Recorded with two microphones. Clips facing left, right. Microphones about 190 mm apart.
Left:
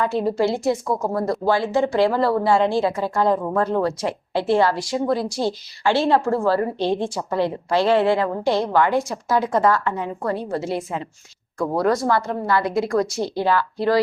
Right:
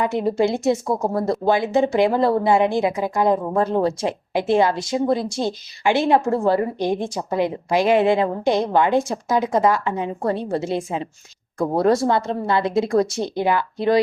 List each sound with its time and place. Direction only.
0.0 s a woman's voice: 20° right (ahead or behind)